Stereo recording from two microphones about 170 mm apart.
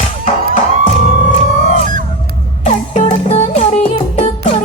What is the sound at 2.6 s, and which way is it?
Music, 45° left (ahead or behind).